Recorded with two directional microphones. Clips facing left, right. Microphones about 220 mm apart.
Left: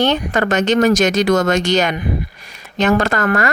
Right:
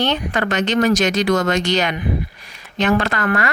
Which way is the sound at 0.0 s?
45° left (ahead or behind).